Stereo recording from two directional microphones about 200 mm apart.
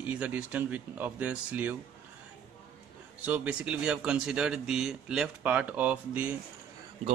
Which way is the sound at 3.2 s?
5° right (ahead or behind).